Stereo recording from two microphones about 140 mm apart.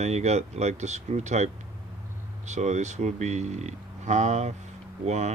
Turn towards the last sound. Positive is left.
turn(degrees=-55)  # may be behind; listen again after turning